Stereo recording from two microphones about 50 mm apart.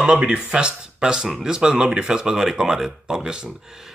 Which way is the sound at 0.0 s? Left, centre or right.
Centre.